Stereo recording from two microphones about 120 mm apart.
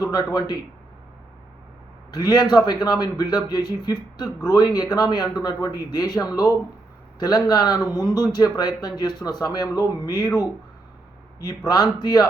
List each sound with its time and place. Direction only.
0.0 s speech: 35° left (ahead or behind)
2.0 s speech: 35° left (ahead or behind)